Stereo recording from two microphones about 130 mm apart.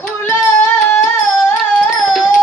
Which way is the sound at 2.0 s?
Centre (ahead or behind).